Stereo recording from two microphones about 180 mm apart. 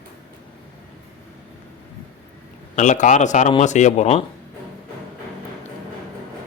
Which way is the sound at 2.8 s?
40° left (ahead or behind).